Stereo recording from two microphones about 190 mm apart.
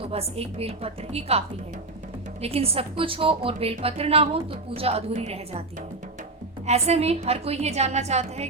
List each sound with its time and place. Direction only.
0.0 s a woman's voice: 30° right (ahead or behind)
6.7 s a woman's voice: 35° right (ahead or behind)